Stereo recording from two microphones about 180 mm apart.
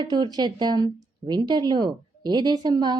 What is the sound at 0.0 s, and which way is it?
A woman's voice, 25° right (ahead or behind).